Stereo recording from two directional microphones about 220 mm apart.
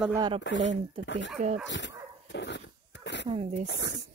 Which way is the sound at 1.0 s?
55° left (ahead or behind).